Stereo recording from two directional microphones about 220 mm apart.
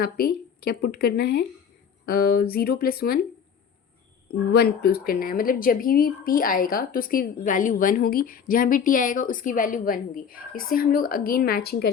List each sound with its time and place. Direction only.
0.0 s speech: 45° left (ahead or behind)
4.3 s speech: 45° left (ahead or behind)